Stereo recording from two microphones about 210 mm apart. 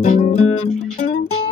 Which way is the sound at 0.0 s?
35° left (ahead or behind).